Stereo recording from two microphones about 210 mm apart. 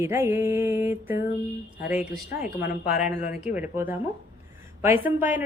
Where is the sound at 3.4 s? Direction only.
10° right (ahead or behind).